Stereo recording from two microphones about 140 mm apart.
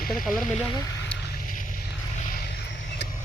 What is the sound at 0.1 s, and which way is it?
Speech, centre (ahead or behind).